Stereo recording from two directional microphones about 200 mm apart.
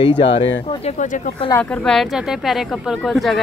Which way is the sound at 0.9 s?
40° left (ahead or behind).